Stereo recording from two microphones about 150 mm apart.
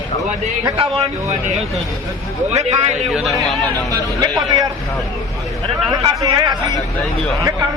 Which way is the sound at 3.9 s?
25° right (ahead or behind).